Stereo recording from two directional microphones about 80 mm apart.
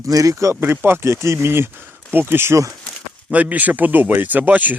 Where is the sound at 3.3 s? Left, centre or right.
Centre.